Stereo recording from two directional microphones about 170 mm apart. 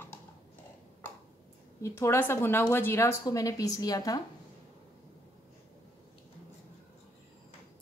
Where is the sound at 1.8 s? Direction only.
15° left (ahead or behind).